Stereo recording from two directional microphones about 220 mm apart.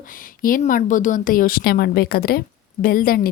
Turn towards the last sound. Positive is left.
turn(degrees=40)  # may be behind; listen again after turning